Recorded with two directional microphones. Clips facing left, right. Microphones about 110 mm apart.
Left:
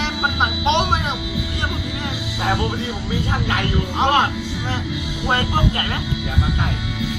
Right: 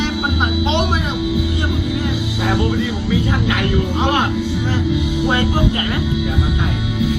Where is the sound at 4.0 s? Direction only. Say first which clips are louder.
Left 2 dB; 30° left (ahead or behind).